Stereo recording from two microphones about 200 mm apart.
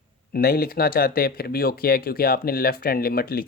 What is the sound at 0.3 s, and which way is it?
Speech, 50° left (ahead or behind).